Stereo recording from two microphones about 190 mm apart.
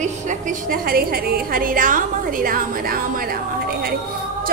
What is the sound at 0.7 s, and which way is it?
A woman's voice, 50° right (ahead or behind).